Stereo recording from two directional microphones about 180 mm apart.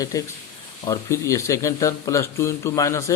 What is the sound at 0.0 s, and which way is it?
Speech, 20° left (ahead or behind).